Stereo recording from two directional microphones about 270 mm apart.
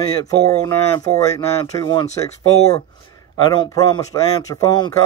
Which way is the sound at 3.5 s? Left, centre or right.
Centre.